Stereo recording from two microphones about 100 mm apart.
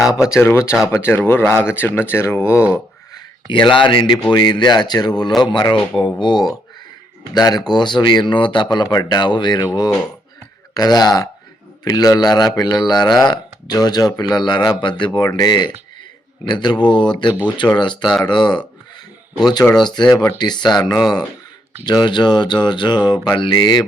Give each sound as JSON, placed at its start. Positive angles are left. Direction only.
{"t": 0.0, "sound": "speech", "side_deg": -5}
{"t": 0.3, "sound": "speech", "side_deg": 25}
{"t": 3.5, "sound": "speech", "side_deg": 55}
{"t": 10.8, "sound": "speech", "side_deg": 40}